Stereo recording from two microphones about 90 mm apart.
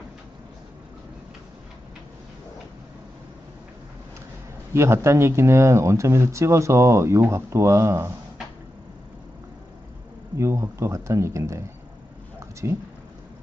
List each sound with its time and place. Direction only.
4.7 s speech: 30° right (ahead or behind)
10.3 s speech: 35° right (ahead or behind)
12.4 s a sound: 30° right (ahead or behind)